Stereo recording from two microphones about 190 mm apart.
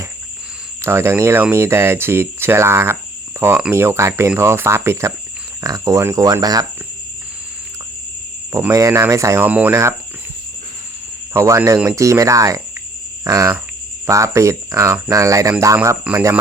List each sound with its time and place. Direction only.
0.8 s speech: 15° right (ahead or behind)
8.5 s speech: 15° right (ahead or behind)
11.3 s speech: 15° right (ahead or behind)